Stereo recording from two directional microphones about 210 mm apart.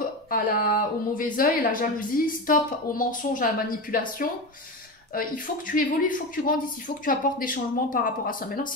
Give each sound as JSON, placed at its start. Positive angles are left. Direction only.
{"t": 0.3, "sound": "a woman's voice", "side_deg": 40}